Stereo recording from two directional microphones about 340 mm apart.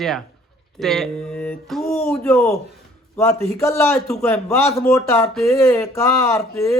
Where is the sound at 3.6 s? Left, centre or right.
Centre.